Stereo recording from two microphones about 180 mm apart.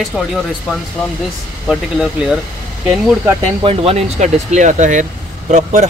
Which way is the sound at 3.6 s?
30° right (ahead or behind).